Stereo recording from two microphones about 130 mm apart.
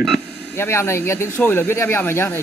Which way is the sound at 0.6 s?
20° left (ahead or behind).